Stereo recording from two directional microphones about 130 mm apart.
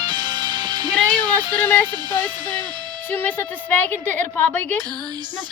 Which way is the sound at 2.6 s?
35° right (ahead or behind).